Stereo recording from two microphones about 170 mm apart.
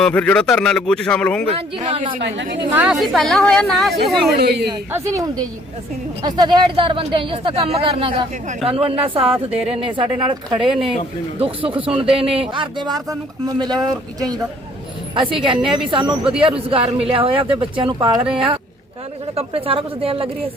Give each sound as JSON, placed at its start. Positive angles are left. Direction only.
{"t": 0.0, "sound": "a man's voice", "side_deg": 10}
{"t": 1.5, "sound": "a woman's voice", "side_deg": -30}
{"t": 2.7, "sound": "a man's voice", "side_deg": -5}
{"t": 4.4, "sound": "a woman's voice", "side_deg": -75}
{"t": 4.9, "sound": "a woman's voice", "side_deg": -15}